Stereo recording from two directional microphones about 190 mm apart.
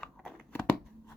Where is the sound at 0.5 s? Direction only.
10° left (ahead or behind).